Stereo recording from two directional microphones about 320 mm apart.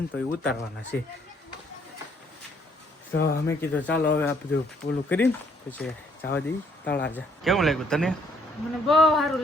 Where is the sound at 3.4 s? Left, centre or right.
Centre.